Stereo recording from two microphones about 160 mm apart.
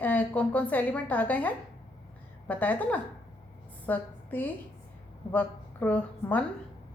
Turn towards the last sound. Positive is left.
turn(degrees=10)  # may be behind; listen again after turning